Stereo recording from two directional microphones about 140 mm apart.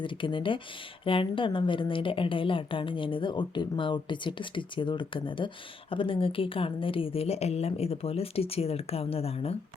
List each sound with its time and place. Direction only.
0.0 s a woman's voice: 35° left (ahead or behind)